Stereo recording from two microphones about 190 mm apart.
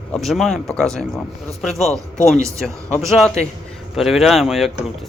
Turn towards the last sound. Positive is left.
turn(degrees=0)  # may be behind; listen again after turning